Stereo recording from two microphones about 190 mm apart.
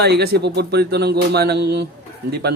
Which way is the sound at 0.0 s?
60° right (ahead or behind).